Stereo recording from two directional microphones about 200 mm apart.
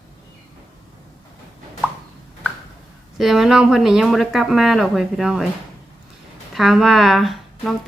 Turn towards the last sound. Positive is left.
turn(degrees=0)  # may be behind; listen again after turning